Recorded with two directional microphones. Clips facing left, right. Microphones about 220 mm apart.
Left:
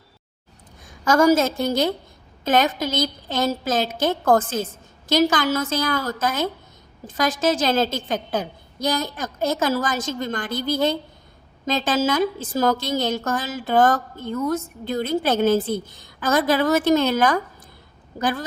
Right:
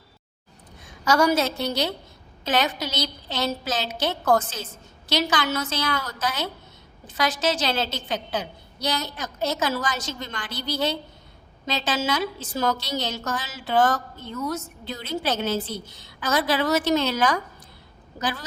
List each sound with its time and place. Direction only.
1.0 s a woman's voice: 50° left (ahead or behind)